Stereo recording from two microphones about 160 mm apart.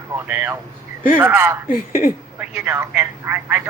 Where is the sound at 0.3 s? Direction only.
15° right (ahead or behind).